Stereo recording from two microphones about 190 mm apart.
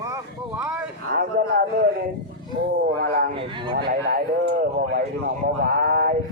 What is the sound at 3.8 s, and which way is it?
Speech, 60° right (ahead or behind).